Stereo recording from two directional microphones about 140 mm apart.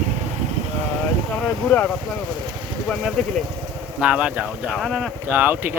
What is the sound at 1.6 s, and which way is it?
Speech, 10° left (ahead or behind).